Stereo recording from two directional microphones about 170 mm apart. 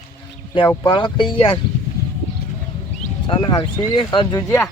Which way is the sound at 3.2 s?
25° left (ahead or behind).